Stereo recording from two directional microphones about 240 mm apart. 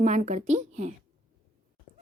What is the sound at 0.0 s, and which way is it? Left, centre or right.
Speech, right.